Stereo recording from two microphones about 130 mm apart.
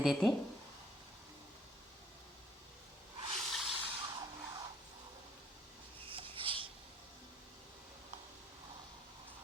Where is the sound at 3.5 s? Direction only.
Centre (ahead or behind).